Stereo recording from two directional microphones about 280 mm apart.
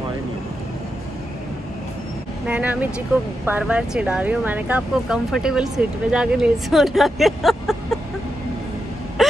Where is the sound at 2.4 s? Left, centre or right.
Centre.